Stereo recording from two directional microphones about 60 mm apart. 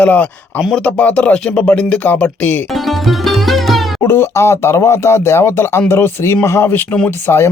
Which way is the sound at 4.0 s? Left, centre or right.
Left.